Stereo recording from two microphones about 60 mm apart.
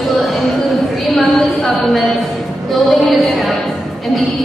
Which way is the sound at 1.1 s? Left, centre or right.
Centre.